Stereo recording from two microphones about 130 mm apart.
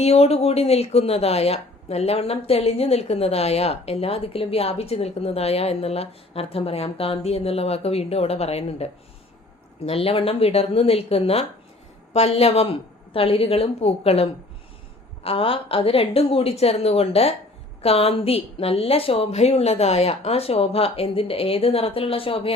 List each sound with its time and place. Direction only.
0.0 s speech: 55° left (ahead or behind)